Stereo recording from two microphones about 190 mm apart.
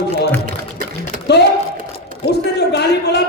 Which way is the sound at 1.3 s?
60° left (ahead or behind).